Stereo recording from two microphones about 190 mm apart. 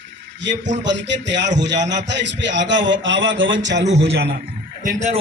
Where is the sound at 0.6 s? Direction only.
70° right (ahead or behind).